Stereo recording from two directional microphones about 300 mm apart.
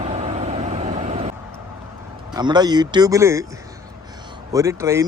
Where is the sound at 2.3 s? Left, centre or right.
Centre.